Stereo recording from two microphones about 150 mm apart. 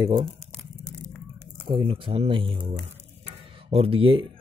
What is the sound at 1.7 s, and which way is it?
Speech, 35° right (ahead or behind).